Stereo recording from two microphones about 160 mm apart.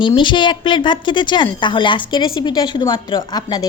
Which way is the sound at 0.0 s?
30° left (ahead or behind).